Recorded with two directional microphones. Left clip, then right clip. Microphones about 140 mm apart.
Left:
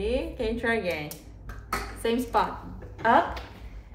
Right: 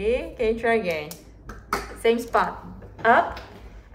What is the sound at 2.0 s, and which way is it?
Speech, 5° left (ahead or behind).